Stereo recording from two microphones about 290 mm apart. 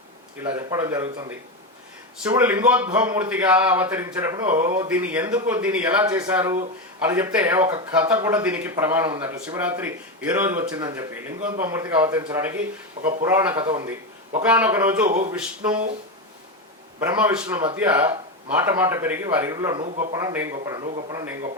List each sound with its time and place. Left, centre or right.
0.4 s a man's voice: centre
14.4 s a man's voice: centre
15.0 s speech: right
15.3 s a man's voice: centre
17.0 s a man's voice: centre